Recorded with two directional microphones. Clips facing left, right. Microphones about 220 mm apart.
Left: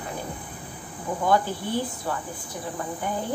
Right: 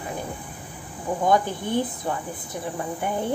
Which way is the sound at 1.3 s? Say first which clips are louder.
Right 1 dB; 20° right (ahead or behind).